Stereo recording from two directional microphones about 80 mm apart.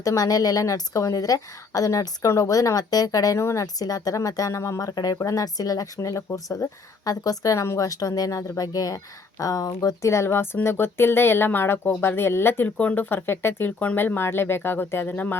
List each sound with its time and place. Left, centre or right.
0.0 s speech: left
10.2 s speech: left